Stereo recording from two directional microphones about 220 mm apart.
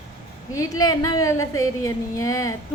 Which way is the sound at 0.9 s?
15° left (ahead or behind).